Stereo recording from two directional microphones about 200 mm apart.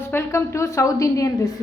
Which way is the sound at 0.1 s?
15° left (ahead or behind).